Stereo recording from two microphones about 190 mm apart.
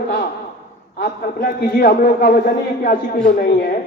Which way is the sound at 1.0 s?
55° left (ahead or behind).